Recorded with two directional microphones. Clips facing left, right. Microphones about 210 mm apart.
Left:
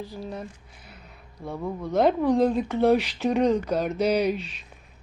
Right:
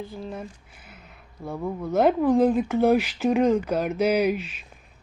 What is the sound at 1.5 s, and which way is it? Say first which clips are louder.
Speech: right 2 dB; 5° right (ahead or behind).